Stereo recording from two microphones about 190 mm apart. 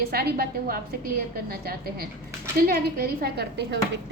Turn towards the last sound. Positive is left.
turn(degrees=-65)  # may be behind; listen again after turning